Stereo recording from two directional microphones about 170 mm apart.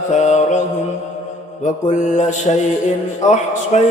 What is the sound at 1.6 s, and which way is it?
Music, 45° left (ahead or behind).